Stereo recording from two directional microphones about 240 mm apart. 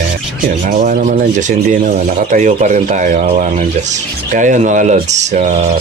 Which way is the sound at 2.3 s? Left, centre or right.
Right.